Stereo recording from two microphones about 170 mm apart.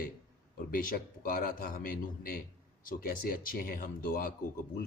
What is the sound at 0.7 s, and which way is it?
Speech, 55° left (ahead or behind).